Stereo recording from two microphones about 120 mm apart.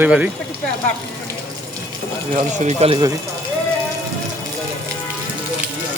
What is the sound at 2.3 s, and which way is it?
Speech, 85° right.